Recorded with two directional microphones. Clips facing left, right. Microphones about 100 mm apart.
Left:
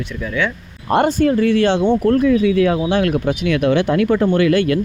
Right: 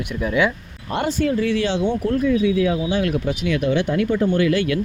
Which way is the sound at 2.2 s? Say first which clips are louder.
Left 4 dB; 85° left.